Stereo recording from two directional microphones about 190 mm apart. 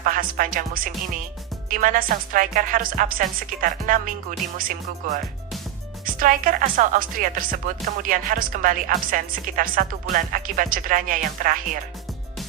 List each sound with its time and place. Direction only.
0.0 s speech: 45° right (ahead or behind)